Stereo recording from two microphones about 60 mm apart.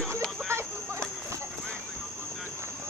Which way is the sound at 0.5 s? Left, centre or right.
Right.